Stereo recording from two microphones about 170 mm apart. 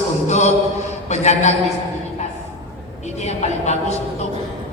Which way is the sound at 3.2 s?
40° left (ahead or behind).